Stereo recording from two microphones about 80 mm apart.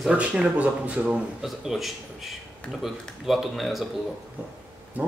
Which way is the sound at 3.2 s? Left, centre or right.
Centre.